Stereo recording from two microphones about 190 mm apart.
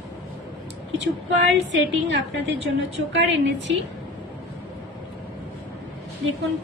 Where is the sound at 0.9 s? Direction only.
70° right (ahead or behind).